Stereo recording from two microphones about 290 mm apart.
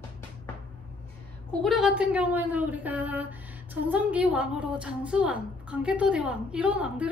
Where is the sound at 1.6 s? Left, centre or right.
Centre.